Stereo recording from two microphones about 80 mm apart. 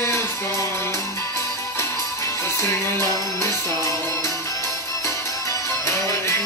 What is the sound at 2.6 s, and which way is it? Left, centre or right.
Music, left.